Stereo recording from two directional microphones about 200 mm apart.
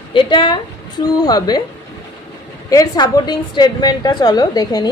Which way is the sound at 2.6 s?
20° left (ahead or behind).